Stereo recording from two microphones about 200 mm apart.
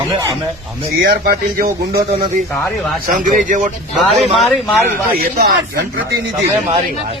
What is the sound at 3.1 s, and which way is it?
Speech, 40° right (ahead or behind).